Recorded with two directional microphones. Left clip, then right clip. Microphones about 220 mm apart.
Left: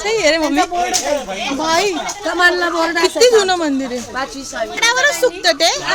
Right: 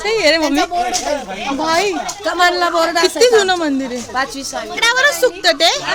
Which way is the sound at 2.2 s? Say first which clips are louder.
Even; 35° right (ahead or behind).